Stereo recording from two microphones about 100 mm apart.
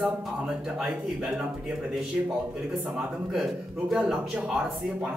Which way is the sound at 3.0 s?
5° right (ahead or behind).